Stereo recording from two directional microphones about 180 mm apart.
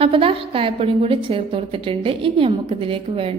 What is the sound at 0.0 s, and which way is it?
A woman's voice, 30° right (ahead or behind).